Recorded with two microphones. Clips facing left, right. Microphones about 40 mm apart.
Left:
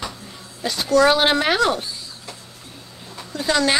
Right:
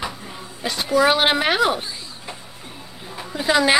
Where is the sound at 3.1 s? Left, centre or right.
Centre.